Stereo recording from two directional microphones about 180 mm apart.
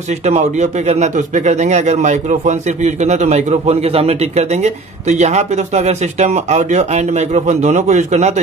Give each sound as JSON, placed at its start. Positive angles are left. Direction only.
{"t": 0.2, "sound": "a man's voice", "side_deg": -40}